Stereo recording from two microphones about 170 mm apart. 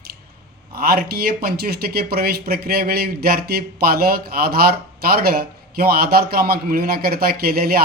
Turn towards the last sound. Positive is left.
turn(degrees=-60)  # may be behind; listen again after turning